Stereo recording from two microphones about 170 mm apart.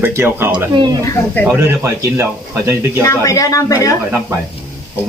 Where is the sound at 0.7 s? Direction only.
25° right (ahead or behind).